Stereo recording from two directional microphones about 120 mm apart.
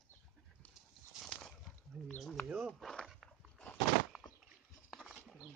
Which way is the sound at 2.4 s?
10° right (ahead or behind).